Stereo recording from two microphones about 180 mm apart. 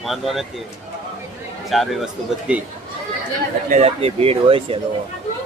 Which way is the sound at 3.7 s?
35° right (ahead or behind).